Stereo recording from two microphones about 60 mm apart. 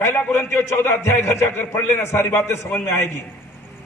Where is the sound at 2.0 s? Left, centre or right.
Left.